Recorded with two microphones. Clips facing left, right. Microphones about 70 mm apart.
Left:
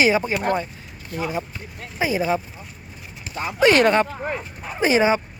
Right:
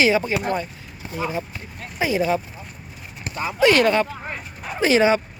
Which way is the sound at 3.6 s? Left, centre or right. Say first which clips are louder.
Left 1 dB; left.